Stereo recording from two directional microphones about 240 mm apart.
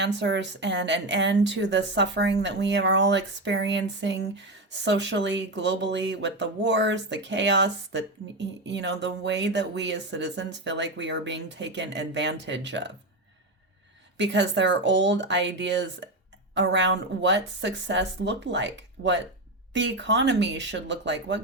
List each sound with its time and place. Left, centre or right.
0.0 s a woman's voice: right
14.2 s a woman's voice: right